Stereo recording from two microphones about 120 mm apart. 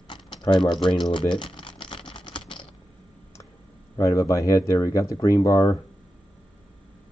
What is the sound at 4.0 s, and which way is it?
Speech, 25° left (ahead or behind).